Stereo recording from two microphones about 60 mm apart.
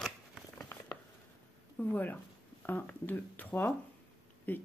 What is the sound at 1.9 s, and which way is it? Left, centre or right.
Speech, left.